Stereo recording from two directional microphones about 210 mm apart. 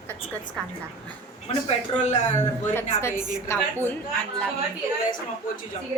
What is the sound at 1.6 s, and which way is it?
Speech, 35° left (ahead or behind).